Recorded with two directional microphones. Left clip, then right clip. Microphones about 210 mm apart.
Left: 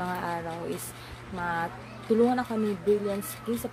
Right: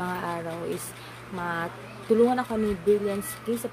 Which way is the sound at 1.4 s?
5° right (ahead or behind).